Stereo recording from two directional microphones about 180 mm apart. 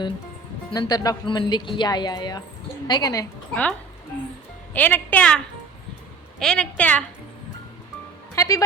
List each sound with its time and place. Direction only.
0.7 s speech: 20° left (ahead or behind)
3.5 s speech: 10° left (ahead or behind)
6.4 s speech: 5° left (ahead or behind)
8.4 s speech: 20° left (ahead or behind)